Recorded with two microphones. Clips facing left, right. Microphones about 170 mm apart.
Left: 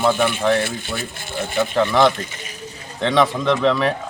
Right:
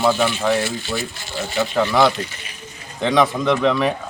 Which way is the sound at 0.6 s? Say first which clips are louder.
Right 2 dB; 55° left (ahead or behind).